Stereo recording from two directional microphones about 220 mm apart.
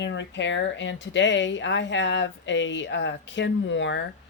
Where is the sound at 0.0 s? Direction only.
55° left (ahead or behind).